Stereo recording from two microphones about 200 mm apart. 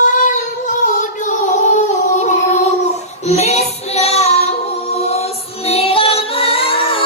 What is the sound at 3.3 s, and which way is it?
Child singing, 35° left (ahead or behind).